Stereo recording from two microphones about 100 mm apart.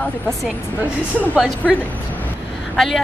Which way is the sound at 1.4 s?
5° right (ahead or behind).